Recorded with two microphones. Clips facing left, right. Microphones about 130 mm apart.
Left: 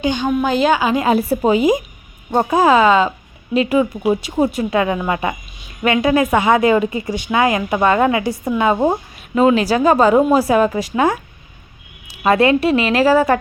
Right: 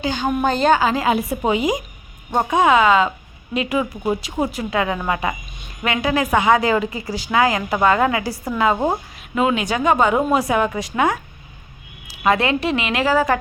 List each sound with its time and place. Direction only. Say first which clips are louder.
0.0 s a woman's voice: left 4 dB; 20° left (ahead or behind)
0.4 s a woman's voice: even; 5° left (ahead or behind)
1.0 s a woman's voice: left 4 dB; 30° left (ahead or behind)
8.7 s a woman's voice: left 4 dB; 5° left (ahead or behind)
9.3 s a woman's voice: left 6 dB; 30° left (ahead or behind)
12.2 s a woman's voice: left 4 dB; 30° left (ahead or behind)
12.5 s a woman's voice: left 6 dB; 25° right (ahead or behind)
12.9 s a woman's voice: left 4 dB; 30° left (ahead or behind)